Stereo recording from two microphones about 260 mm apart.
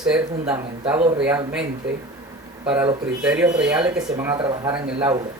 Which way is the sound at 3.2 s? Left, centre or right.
Centre.